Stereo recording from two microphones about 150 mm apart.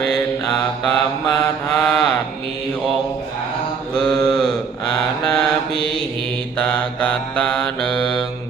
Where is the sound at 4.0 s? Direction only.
10° left (ahead or behind).